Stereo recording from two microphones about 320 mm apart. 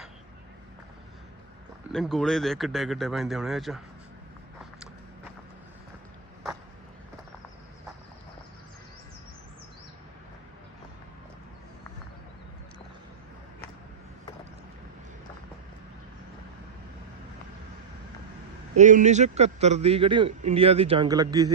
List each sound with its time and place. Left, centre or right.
1.9 s speech: centre
18.8 s a man's voice: right